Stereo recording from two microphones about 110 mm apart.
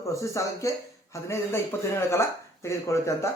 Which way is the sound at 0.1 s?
30° left (ahead or behind).